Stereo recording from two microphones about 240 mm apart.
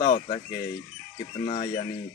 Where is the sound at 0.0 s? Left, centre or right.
Left.